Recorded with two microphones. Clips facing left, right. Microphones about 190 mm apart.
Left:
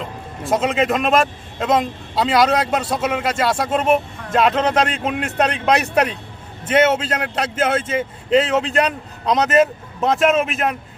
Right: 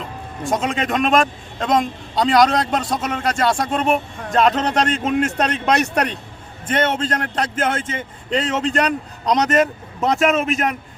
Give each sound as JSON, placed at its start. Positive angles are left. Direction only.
{"t": 0.4, "sound": "a man's voice", "side_deg": 5}